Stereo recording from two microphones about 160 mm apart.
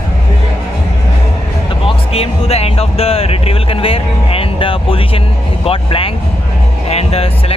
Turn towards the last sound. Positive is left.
turn(degrees=40)  # may be behind; listen again after turning